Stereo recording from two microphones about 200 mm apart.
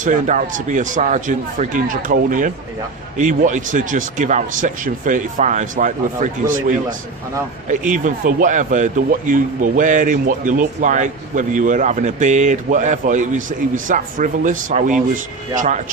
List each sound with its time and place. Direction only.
0.0 s speech: 40° right (ahead or behind)